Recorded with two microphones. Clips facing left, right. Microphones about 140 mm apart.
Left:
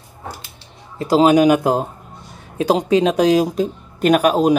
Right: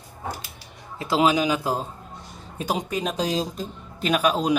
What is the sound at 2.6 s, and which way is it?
Speech, 85° left.